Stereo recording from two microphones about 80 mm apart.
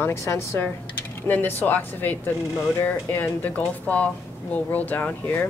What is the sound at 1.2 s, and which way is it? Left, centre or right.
A woman's voice, left.